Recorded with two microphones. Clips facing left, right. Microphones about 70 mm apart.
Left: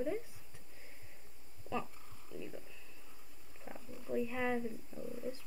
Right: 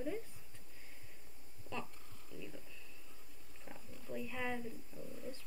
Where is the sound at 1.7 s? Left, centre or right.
Left.